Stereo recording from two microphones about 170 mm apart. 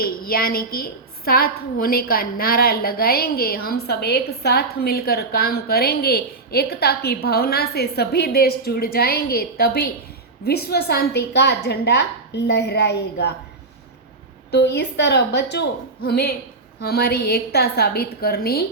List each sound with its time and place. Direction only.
0.0 s a woman's voice: 60° left (ahead or behind); by 13.3 s 80° left
14.5 s a woman's voice: 85° left; by 18.6 s 65° left (ahead or behind)